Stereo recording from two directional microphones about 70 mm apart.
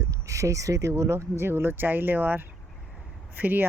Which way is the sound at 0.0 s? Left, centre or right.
Right.